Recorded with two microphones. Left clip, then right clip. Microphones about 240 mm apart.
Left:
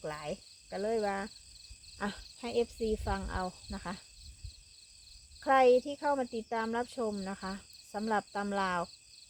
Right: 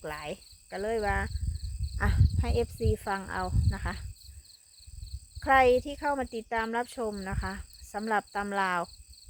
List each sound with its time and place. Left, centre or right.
0.0 s cricket: right
2.0 s speech: right
5.4 s speech: right
6.0 s speech: right
6.3 s speech: right
7.1 s speech: right
7.4 s speech: right